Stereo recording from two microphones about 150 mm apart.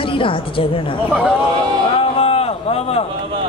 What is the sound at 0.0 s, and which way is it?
Speech, 35° left (ahead or behind).